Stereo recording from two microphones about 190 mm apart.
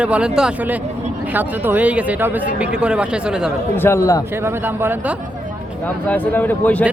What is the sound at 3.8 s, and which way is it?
Speech, 15° left (ahead or behind).